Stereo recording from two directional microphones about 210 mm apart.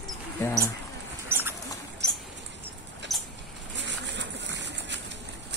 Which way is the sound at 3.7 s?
60° right (ahead or behind).